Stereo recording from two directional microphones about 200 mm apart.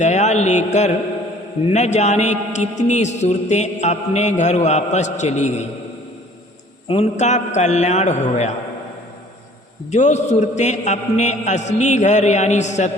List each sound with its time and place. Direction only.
0.0 s a man's voice: 35° left (ahead or behind)
6.8 s a man's voice: 30° left (ahead or behind)
9.9 s a man's voice: 35° left (ahead or behind)